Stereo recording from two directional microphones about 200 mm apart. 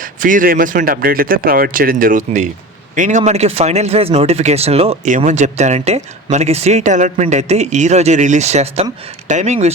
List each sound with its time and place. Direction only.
0.0 s speech: 40° right (ahead or behind)